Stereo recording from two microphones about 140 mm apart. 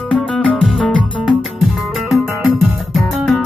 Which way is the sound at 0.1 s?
Centre (ahead or behind).